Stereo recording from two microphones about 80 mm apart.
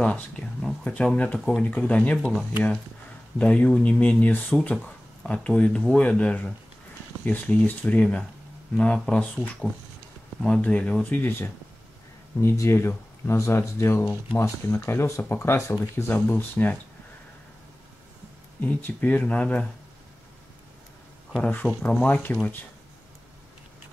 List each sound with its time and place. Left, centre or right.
0.0 s speech: centre
11.1 s speech: left
18.6 s speech: left
21.4 s speech: left